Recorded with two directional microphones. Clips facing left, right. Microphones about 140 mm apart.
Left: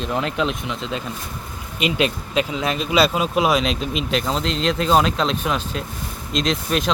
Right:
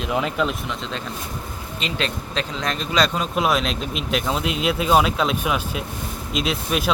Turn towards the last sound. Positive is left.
turn(degrees=-5)  # may be behind; listen again after turning